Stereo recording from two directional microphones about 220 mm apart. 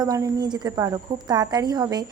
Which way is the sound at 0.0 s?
15° right (ahead or behind).